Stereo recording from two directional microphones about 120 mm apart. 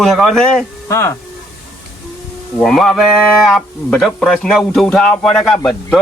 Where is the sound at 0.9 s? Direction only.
20° left (ahead or behind).